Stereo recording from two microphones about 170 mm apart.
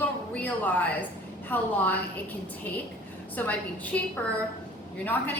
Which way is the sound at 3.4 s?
10° left (ahead or behind).